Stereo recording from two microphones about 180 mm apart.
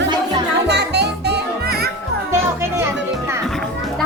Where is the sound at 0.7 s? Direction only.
70° right (ahead or behind).